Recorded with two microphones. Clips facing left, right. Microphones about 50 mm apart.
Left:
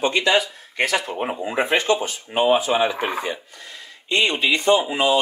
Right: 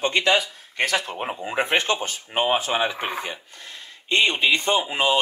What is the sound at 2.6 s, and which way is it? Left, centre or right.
Speech, left.